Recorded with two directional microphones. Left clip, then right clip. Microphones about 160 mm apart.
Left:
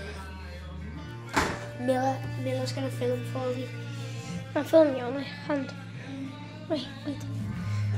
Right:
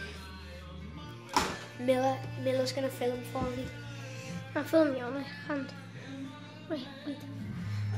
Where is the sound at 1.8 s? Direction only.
20° right (ahead or behind).